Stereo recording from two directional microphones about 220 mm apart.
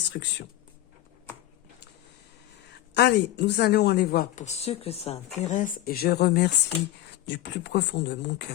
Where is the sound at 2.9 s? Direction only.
50° left (ahead or behind).